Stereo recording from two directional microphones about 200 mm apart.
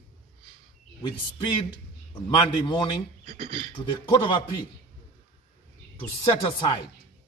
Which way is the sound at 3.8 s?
25° left (ahead or behind).